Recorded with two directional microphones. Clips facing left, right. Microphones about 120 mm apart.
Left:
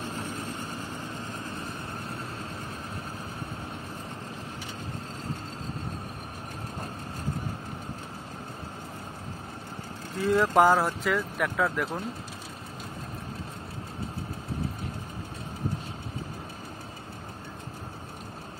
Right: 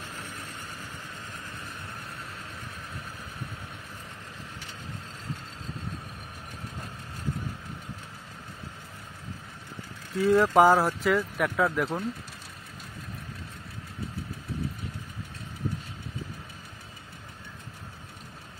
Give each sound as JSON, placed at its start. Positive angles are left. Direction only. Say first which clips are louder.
{"t": 0.0, "sound": "vehicle", "louder": "left 6 dB", "side_deg": 30}
{"t": 10.1, "sound": "speech", "louder": "right 2 dB", "side_deg": 0}